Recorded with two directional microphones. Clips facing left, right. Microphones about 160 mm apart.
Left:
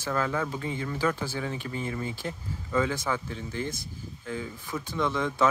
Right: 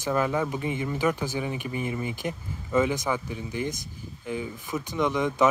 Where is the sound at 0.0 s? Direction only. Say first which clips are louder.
Right 3 dB; 15° right (ahead or behind).